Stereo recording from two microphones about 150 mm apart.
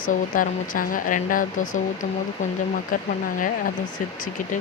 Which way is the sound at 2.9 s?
65° left (ahead or behind).